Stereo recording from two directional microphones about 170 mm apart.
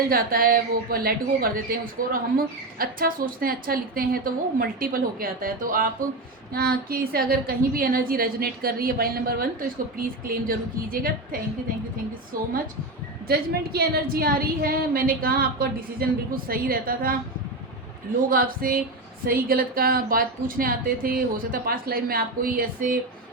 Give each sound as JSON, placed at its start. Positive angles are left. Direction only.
{"t": 0.1, "sound": "a woman's voice", "side_deg": -60}
{"t": 13.2, "sound": "a woman's voice", "side_deg": -65}
{"t": 18.3, "sound": "a woman's voice", "side_deg": -55}